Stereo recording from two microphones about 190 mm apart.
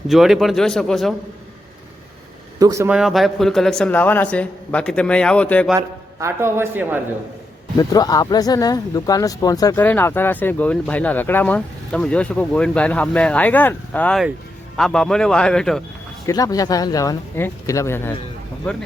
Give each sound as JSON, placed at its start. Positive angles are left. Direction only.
{"t": 0.1, "sound": "a man's voice", "side_deg": 0}
{"t": 2.6, "sound": "a man's voice", "side_deg": -15}
{"t": 2.9, "sound": "a man's voice", "side_deg": 0}
{"t": 6.1, "sound": "a man's voice", "side_deg": -15}
{"t": 7.8, "sound": "a man's voice", "side_deg": 20}
{"t": 16.2, "sound": "speech", "side_deg": 20}